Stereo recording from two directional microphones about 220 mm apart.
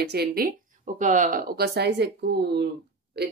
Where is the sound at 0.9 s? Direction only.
35° right (ahead or behind).